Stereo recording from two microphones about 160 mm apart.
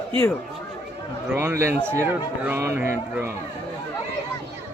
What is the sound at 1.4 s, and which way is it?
Speech, 15° right (ahead or behind).